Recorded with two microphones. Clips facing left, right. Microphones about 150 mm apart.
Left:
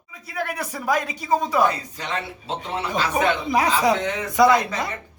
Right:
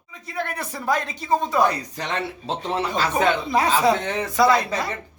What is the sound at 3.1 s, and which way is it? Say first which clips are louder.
Speech: even; 15° left (ahead or behind).